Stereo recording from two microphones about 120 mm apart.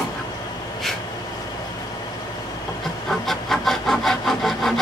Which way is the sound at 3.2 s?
Centre (ahead or behind).